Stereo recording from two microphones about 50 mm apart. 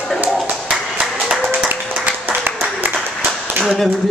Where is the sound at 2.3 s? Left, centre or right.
Right.